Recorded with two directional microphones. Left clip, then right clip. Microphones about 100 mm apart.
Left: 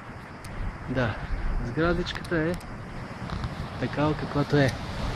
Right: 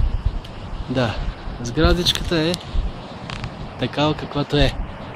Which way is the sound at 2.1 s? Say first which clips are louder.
Right 7 dB; 45° right (ahead or behind).